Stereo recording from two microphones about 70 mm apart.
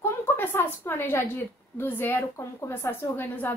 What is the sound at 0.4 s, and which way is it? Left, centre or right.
A woman's voice, left.